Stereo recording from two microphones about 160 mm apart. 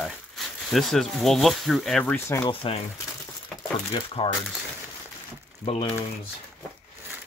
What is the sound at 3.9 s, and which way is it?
Speech, 35° left (ahead or behind).